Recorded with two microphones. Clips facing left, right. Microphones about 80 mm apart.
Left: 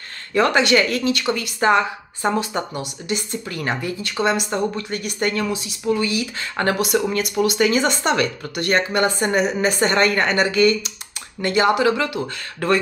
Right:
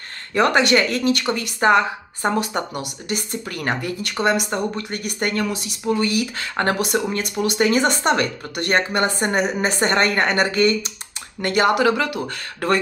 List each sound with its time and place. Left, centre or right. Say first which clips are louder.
0.3 s speech: even; right
11.4 s speech: even; right